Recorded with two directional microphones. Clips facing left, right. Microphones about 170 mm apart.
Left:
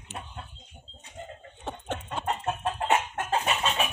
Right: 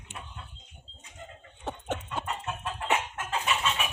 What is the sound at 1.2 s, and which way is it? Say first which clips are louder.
Bird: left 5 dB; 35° left (ahead or behind).